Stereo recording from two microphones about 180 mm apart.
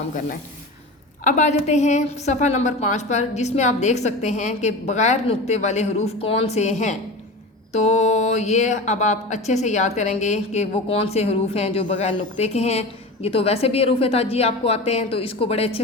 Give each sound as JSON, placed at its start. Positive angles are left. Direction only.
{"t": 1.2, "sound": "a woman's voice", "side_deg": 45}